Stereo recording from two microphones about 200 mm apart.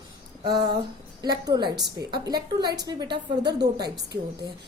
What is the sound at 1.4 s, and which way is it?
A woman's voice, 20° right (ahead or behind).